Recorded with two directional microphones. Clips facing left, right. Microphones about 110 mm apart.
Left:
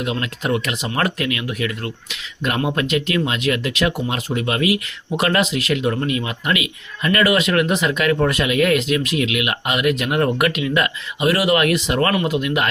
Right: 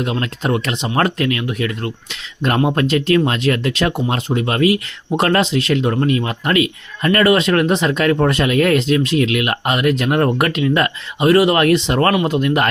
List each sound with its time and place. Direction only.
0.0 s speech: 35° right (ahead or behind)